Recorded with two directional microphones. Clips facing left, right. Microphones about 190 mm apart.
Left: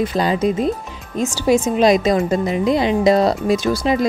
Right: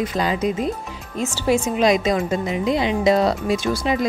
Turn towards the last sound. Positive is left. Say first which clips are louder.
# left 3 dB
turn(degrees=35)  # may be behind; listen again after turning